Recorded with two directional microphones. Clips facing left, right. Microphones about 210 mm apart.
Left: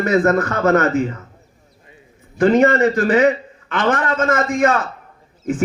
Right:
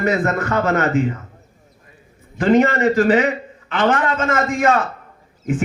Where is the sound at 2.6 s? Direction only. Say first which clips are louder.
Left 1 dB; 45° left (ahead or behind).